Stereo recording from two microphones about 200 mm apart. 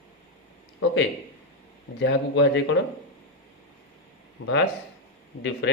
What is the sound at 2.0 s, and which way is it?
Speech, 60° left (ahead or behind).